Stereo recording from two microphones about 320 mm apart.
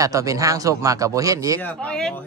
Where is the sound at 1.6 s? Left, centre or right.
Centre.